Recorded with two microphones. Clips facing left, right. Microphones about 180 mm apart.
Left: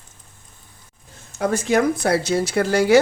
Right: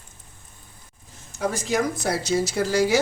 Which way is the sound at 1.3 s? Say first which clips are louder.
Left 5 dB; 60° left (ahead or behind).